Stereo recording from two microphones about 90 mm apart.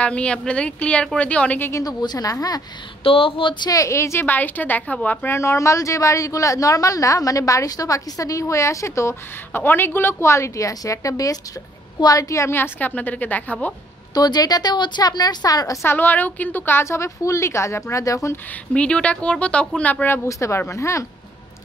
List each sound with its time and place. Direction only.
0.0 s a woman's voice: 15° left (ahead or behind)
1.7 s a woman's voice: 40° left (ahead or behind)
3.0 s speech: 90° left; by 3.7 s 60° left (ahead or behind)
3.7 s a woman's voice: 35° left (ahead or behind); by 5.3 s 15° left (ahead or behind)
5.3 s a woman's voice: 30° left (ahead or behind); by 13.7 s 15° left (ahead or behind)
14.1 s a woman's voice: 50° left (ahead or behind)
15.8 s a woman's voice: 25° left (ahead or behind)
18.7 s a woman's voice: 10° left (ahead or behind)
20.2 s a woman's voice: 35° left (ahead or behind)